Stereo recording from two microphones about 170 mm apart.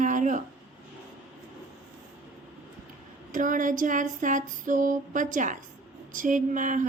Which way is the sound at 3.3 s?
50° right (ahead or behind).